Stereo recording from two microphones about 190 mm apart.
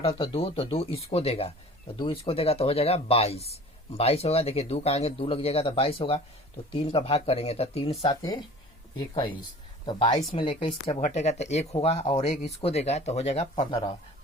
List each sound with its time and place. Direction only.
0.2 s speech: 30° left (ahead or behind)